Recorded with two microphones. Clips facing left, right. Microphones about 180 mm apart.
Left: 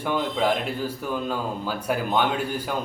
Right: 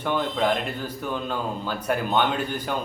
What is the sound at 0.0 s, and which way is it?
Speech, 10° left (ahead or behind).